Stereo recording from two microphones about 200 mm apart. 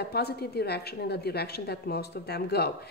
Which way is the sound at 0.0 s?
55° left (ahead or behind).